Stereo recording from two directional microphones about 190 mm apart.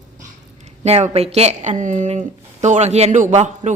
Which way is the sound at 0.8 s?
35° right (ahead or behind).